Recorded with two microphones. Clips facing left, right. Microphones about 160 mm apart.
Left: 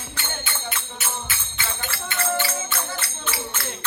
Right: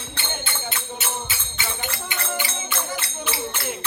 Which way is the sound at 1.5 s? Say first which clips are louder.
Right 2 dB; 20° right (ahead or behind).